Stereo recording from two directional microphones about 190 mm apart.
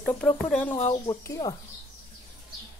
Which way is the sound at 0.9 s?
20° left (ahead or behind).